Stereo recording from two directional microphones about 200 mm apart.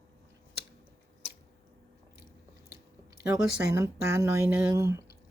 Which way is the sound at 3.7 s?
15° right (ahead or behind).